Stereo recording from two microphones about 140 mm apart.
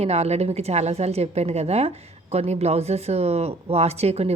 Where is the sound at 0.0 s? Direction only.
50° right (ahead or behind).